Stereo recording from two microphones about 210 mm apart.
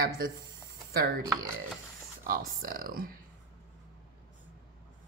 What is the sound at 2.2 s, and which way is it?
Speech, 45° right (ahead or behind).